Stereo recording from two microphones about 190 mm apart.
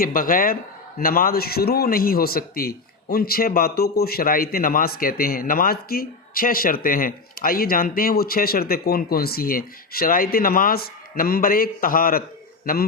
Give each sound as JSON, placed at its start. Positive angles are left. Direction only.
{"t": 0.0, "sound": "speech", "side_deg": 50}